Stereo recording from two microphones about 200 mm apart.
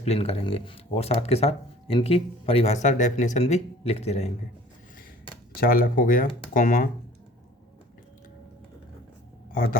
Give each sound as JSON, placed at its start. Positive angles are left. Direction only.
{"t": 0.0, "sound": "speech", "side_deg": 30}
{"t": 5.5, "sound": "speech", "side_deg": 50}